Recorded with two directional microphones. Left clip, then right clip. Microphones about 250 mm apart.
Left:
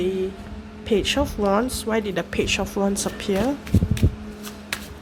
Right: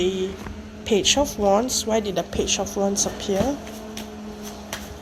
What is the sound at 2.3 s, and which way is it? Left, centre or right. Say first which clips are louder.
Speech: left 2 dB; left.